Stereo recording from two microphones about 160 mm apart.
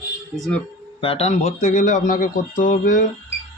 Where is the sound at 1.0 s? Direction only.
40° left (ahead or behind).